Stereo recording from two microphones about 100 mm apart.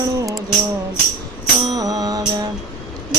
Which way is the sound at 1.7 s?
40° right (ahead or behind).